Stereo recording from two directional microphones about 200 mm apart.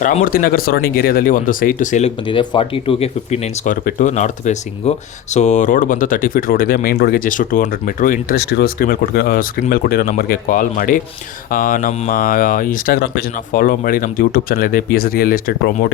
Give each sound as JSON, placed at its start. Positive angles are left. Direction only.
{"t": 0.3, "sound": "speech", "side_deg": 45}